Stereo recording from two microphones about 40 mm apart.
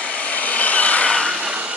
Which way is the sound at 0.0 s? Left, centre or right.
Left.